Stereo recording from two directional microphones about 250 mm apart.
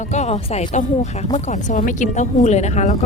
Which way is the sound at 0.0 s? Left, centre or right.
Left.